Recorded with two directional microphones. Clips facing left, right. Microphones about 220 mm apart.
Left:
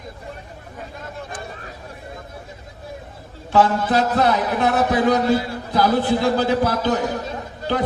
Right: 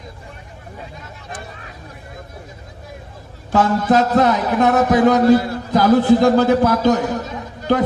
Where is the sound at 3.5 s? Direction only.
40° right (ahead or behind).